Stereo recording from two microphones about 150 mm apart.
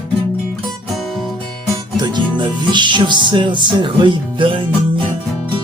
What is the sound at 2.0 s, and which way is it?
Music, 30° right (ahead or behind).